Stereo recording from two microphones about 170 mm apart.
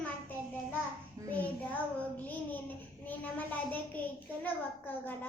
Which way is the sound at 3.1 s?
10° left (ahead or behind).